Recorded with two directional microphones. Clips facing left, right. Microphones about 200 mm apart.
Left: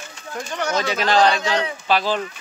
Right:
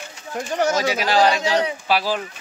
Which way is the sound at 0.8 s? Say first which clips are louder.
Left 4 dB; 10° right (ahead or behind).